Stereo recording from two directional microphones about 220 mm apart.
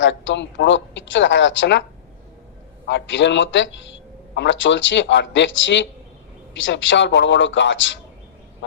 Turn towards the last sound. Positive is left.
turn(degrees=55)  # may be behind; listen again after turning